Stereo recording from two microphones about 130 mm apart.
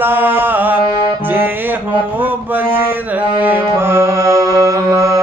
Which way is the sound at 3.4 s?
15° right (ahead or behind).